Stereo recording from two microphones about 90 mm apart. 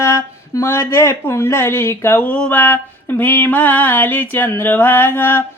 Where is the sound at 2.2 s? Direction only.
15° left (ahead or behind).